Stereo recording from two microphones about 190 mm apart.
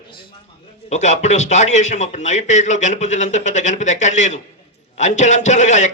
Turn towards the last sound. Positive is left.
turn(degrees=40)  # may be behind; listen again after turning